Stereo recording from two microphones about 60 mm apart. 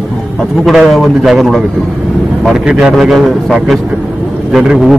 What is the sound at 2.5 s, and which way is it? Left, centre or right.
Speech, centre.